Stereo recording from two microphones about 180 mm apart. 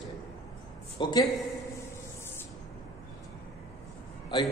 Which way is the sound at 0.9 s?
25° left (ahead or behind).